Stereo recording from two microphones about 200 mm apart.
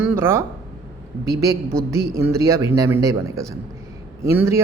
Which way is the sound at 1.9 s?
15° right (ahead or behind).